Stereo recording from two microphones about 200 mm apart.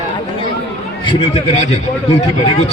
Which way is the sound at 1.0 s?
30° left (ahead or behind).